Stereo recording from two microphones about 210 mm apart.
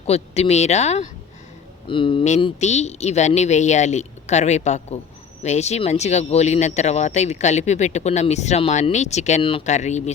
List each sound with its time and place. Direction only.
0.0 s speech: 30° left (ahead or behind)